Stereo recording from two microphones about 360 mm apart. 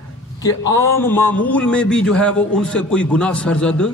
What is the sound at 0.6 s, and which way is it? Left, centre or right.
Speech, left.